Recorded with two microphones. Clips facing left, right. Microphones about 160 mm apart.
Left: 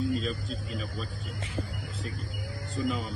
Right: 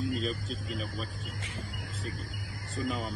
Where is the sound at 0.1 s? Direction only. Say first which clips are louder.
Left 2 dB; centre (ahead or behind).